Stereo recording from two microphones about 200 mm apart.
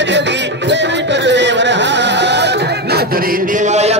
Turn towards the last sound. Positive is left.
turn(degrees=-35)  # may be behind; listen again after turning